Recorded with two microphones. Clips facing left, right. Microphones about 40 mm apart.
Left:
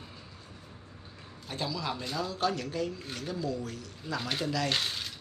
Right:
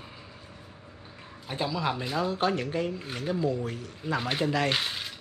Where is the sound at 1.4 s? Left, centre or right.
Right.